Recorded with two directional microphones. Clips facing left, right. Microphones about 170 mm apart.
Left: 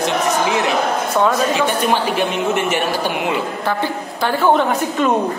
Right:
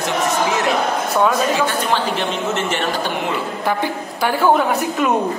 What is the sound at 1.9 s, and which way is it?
A man's voice, 10° left (ahead or behind).